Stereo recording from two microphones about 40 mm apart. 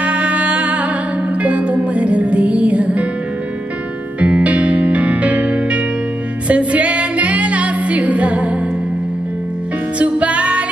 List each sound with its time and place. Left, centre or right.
0.0 s music: right
4.2 s music: right
9.9 s music: right